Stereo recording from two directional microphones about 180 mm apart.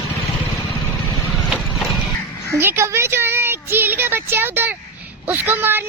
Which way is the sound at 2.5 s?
10° right (ahead or behind).